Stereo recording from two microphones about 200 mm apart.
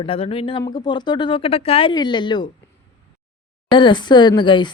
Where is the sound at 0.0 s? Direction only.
30° left (ahead or behind).